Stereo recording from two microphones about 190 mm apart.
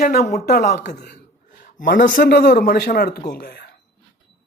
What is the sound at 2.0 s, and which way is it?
Speech, 45° left (ahead or behind).